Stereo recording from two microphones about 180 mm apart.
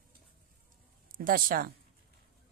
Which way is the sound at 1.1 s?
50° right (ahead or behind).